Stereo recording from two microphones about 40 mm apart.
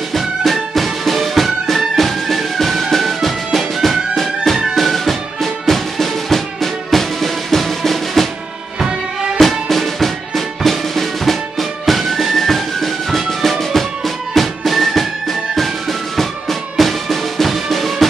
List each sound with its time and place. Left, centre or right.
0.1 s music: centre
8.7 s music: centre
9.4 s music: centre